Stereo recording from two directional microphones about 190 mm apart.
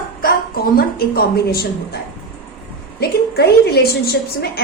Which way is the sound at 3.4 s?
55° left (ahead or behind).